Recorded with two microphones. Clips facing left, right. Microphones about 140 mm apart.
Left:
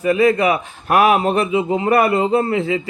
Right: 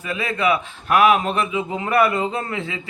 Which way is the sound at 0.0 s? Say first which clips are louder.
Left 8 dB; 40° left (ahead or behind).